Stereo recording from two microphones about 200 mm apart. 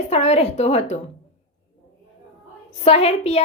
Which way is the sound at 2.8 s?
30° left (ahead or behind).